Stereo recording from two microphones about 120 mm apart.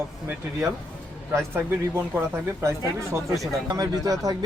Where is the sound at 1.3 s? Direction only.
20° right (ahead or behind).